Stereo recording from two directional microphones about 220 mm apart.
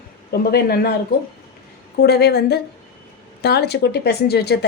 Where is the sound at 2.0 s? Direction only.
45° left (ahead or behind).